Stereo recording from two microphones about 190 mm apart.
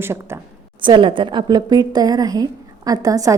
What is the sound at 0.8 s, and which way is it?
A woman's voice, 25° right (ahead or behind).